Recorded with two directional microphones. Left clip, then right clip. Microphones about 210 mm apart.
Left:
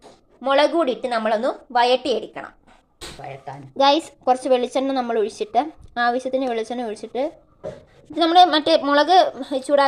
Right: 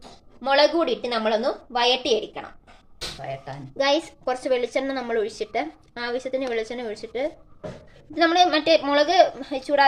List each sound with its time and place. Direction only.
0.4 s a woman's voice: 10° left (ahead or behind)
3.8 s a woman's voice: 20° left (ahead or behind)